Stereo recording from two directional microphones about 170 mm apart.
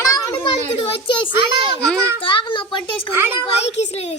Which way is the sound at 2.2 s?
30° left (ahead or behind).